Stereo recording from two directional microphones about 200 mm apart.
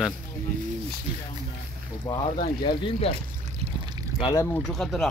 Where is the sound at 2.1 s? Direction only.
5° left (ahead or behind).